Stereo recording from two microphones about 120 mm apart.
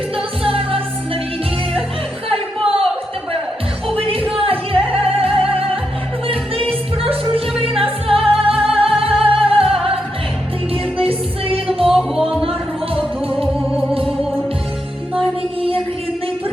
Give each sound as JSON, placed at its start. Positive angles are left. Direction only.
{"t": 0.4, "sound": "music", "side_deg": -50}
{"t": 2.3, "sound": "music", "side_deg": -50}
{"t": 3.8, "sound": "music", "side_deg": -50}
{"t": 11.9, "sound": "music", "side_deg": -5}